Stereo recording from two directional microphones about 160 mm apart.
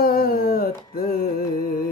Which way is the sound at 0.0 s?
70° left (ahead or behind).